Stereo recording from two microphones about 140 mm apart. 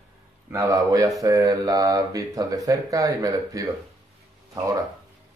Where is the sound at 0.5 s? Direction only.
20° right (ahead or behind).